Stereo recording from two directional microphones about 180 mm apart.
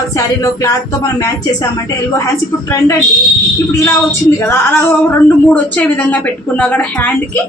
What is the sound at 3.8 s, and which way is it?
Speech, 15° left (ahead or behind).